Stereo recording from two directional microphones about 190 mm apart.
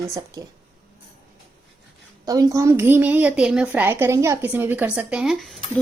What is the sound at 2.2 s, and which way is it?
A woman's voice, 20° right (ahead or behind).